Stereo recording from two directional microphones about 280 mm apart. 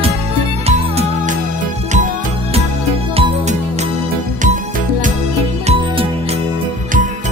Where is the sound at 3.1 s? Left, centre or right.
Right.